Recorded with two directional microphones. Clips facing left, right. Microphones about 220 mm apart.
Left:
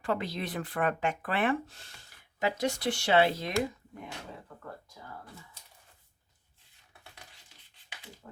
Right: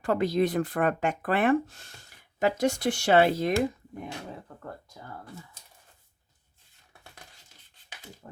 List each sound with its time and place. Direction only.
0.0 s speech: 45° right (ahead or behind)